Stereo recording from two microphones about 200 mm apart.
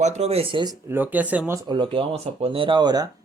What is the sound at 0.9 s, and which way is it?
Speech, 10° right (ahead or behind).